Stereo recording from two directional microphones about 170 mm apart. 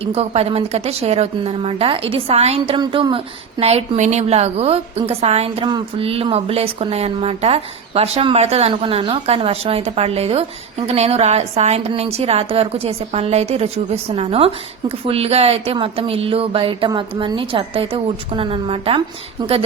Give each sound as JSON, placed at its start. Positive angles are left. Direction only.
{"t": 0.0, "sound": "speech", "side_deg": -35}
{"t": 2.7, "sound": "speech", "side_deg": -25}